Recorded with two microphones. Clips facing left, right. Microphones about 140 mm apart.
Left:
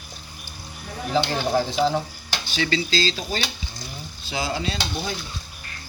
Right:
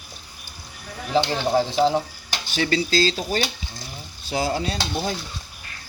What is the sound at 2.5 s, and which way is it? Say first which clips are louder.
Stir: right 3 dB; 45° right (ahead or behind).